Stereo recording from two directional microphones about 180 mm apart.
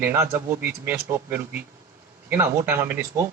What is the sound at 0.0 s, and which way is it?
Speech, 15° right (ahead or behind).